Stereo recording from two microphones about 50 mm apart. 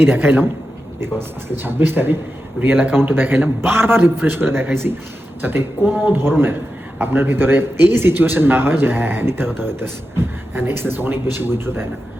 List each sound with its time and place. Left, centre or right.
0.0 s speech: right
2.6 s speech: right